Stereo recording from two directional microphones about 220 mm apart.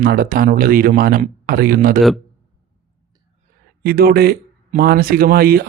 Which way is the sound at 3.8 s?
45° right (ahead or behind).